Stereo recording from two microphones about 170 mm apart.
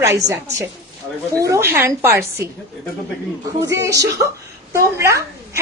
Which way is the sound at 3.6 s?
20° right (ahead or behind).